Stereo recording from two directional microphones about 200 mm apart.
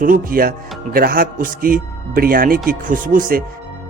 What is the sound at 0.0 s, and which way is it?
Speech, 45° right (ahead or behind).